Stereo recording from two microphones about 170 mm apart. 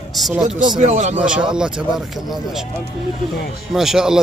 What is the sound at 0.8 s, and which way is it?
Speech, 45° right (ahead or behind).